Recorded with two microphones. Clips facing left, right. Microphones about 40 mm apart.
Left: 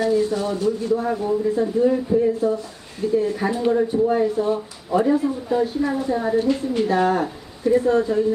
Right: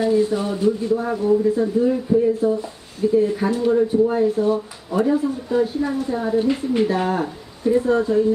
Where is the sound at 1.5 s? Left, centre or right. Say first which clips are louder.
Even; centre.